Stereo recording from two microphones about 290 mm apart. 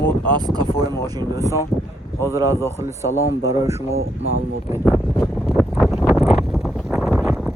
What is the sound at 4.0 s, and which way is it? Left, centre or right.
Speech, right.